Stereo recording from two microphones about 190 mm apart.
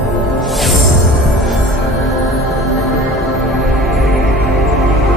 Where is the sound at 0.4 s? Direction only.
Centre (ahead or behind).